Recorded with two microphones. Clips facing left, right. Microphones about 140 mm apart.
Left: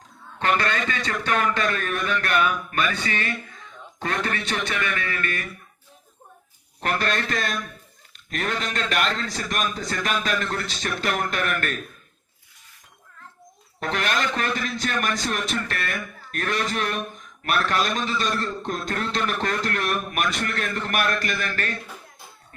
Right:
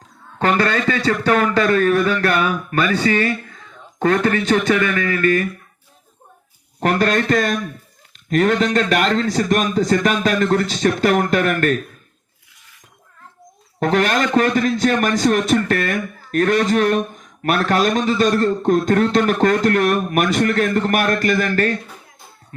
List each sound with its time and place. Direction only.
0.3 s a man's voice: 40° right (ahead or behind)
1.5 s a sound: 40° right (ahead or behind)
2.6 s a man's voice: 35° right (ahead or behind)
7.0 s a man's voice: 40° right (ahead or behind)
13.7 s a man's voice: 45° right (ahead or behind)